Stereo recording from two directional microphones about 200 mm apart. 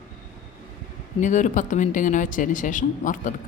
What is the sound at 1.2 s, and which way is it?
Speech, 40° left (ahead or behind).